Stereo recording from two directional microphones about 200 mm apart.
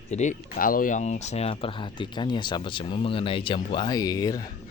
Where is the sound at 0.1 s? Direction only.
35° left (ahead or behind).